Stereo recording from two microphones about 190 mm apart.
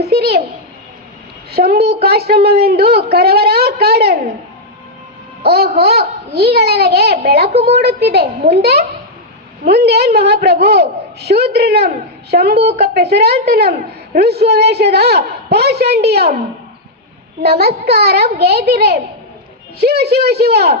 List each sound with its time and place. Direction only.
0.1 s a sound: 55° right (ahead or behind)
1.5 s a woman's voice: 55° right (ahead or behind)
5.4 s a woman's voice: 55° right (ahead or behind)
17.4 s a woman's voice: 55° right (ahead or behind)